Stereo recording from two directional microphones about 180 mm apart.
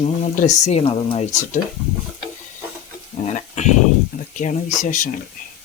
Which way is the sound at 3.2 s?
40° left (ahead or behind).